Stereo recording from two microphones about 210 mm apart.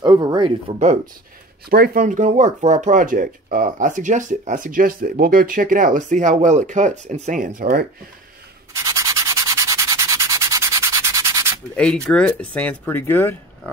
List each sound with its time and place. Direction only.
0.0 s speech: 20° right (ahead or behind)
1.7 s speech: 40° right (ahead or behind)
8.7 s sanding: 15° right (ahead or behind)
11.7 s speech: 5° left (ahead or behind)